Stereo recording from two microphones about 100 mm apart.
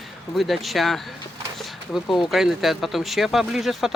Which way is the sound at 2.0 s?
Centre (ahead or behind).